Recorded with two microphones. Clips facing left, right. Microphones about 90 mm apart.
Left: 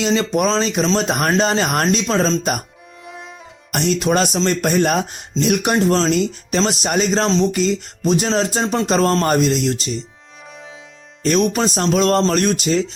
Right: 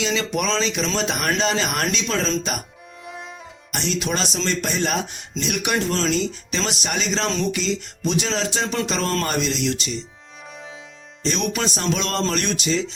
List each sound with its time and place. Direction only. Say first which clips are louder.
0.0 s speech: left 6 dB; 45° left (ahead or behind)
3.7 s speech: left 7 dB; 50° left (ahead or behind)
5.7 s speech: left 3 dB; 35° left (ahead or behind)
8.6 s speech: left 5 dB; 25° left (ahead or behind)
8.9 s speech: left 8 dB; 45° left (ahead or behind)
11.2 s speech: left 7 dB; 50° left (ahead or behind)